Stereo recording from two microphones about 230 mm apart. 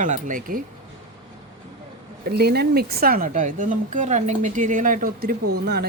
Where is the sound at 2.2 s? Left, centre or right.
Right.